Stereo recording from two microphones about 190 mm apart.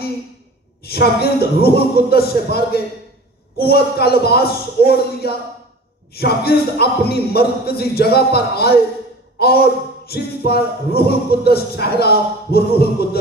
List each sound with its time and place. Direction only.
0.8 s speech: 55° left (ahead or behind)